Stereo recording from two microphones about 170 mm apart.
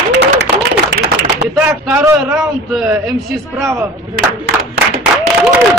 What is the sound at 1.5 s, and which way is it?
A man's voice, 5° right (ahead or behind).